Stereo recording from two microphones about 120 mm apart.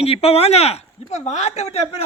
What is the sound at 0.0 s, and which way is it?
A man's voice, 55° left (ahead or behind).